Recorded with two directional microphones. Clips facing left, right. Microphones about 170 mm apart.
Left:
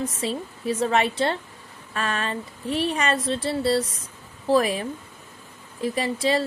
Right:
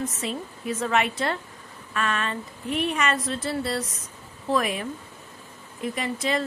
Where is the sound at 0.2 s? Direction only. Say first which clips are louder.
Left 3 dB; 30° left (ahead or behind).